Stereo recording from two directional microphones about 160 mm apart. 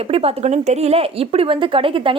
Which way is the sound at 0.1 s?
40° right (ahead or behind).